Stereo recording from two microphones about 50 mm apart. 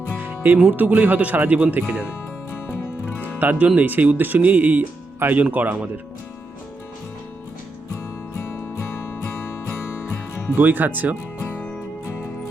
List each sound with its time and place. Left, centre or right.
0.2 s music: right
0.7 s speech: right
2.6 s music: left
3.3 s speech: right
10.6 s speech: right